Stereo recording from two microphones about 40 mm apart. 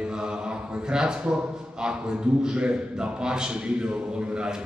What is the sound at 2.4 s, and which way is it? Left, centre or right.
A man's voice, right.